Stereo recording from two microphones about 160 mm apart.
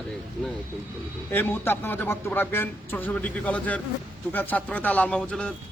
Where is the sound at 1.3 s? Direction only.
15° left (ahead or behind).